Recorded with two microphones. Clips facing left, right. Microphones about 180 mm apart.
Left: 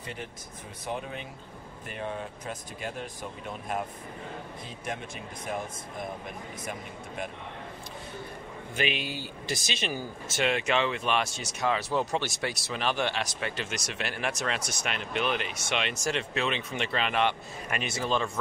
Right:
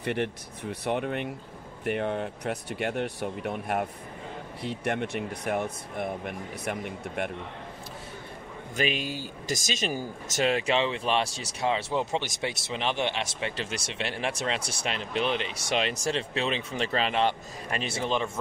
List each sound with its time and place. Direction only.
0.0 s speech: 70° right (ahead or behind)
8.7 s speech: 40° right (ahead or behind); by 18.4 s 20° right (ahead or behind)